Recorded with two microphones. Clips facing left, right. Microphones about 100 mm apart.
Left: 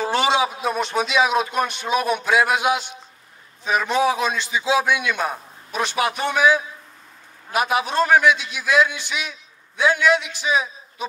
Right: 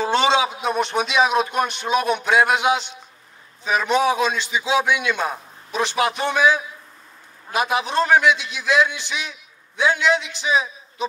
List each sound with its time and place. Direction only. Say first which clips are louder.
0.0 s speech: right 1 dB; 25° right (ahead or behind)
7.5 s speech: even; 25° right (ahead or behind)